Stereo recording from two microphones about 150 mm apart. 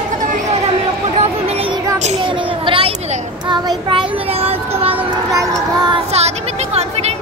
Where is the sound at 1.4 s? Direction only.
40° right (ahead or behind).